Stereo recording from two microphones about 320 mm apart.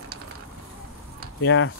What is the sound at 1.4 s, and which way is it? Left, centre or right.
Speech, left.